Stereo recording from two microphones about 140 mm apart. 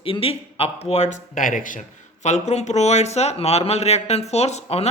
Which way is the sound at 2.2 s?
55° left (ahead or behind).